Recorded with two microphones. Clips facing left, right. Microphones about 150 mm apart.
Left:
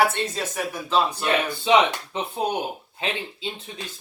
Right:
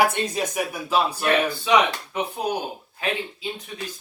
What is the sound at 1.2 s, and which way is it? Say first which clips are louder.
Speech: right 1 dB; 25° left (ahead or behind).